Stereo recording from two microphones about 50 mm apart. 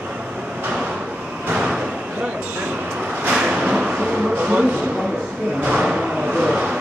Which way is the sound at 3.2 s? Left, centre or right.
Right.